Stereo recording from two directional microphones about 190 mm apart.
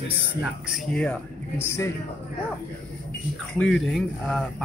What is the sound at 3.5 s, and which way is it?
Speech, 5° left (ahead or behind).